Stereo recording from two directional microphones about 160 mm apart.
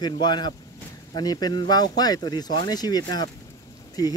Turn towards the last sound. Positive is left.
turn(degrees=25)  # may be behind; listen again after turning